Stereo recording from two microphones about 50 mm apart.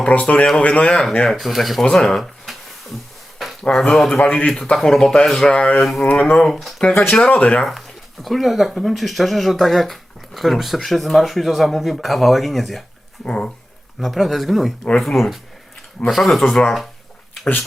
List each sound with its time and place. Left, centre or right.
0.1 s speech: left
1.3 s speech: centre
3.7 s speech: centre
5.5 s speech: left
5.8 s speech: centre
6.1 s speech: left
6.3 s speech: centre
7.2 s speech: left
7.6 s speech: centre
13.2 s speech: centre
14.0 s speech: centre